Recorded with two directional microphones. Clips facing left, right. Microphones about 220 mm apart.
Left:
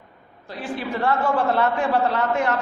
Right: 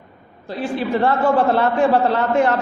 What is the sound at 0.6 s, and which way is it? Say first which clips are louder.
A man's voice: right 6 dB; 30° right (ahead or behind).